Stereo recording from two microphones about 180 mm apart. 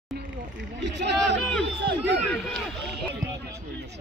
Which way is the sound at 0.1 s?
80° right.